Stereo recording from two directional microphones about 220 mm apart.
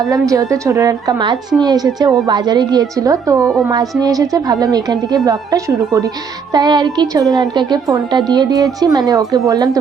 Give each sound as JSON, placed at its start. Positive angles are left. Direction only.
{"t": 0.1, "sound": "a woman's voice", "side_deg": -15}
{"t": 3.4, "sound": "music", "side_deg": 0}
{"t": 3.7, "sound": "a woman's voice", "side_deg": -15}